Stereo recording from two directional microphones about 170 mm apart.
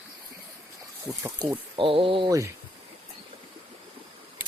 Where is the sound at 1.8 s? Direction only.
30° right (ahead or behind).